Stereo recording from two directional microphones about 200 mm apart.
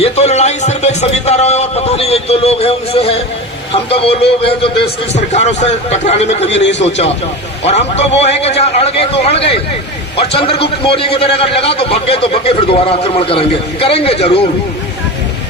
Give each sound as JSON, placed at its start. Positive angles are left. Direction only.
{"t": 0.0, "sound": "a man's voice", "side_deg": 30}
{"t": 6.5, "sound": "a man's voice", "side_deg": 60}
{"t": 6.8, "sound": "a man's voice", "side_deg": 35}